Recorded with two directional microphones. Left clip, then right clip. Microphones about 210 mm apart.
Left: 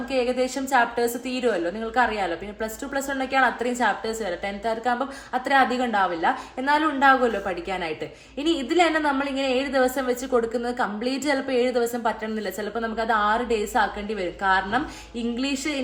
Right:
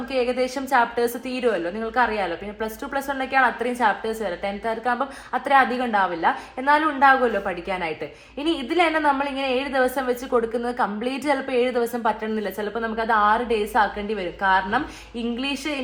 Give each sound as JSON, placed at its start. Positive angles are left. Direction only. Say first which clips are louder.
{"t": 0.1, "sound": "a woman's voice", "louder": "right 1 dB", "side_deg": -20}